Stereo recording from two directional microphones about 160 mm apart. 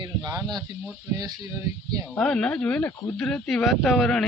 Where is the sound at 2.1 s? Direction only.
5° left (ahead or behind).